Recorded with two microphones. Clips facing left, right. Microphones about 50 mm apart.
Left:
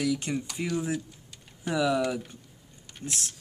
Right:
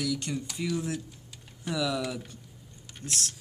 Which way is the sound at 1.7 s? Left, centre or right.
Centre.